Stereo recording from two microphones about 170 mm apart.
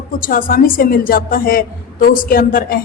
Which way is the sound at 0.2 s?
55° left (ahead or behind).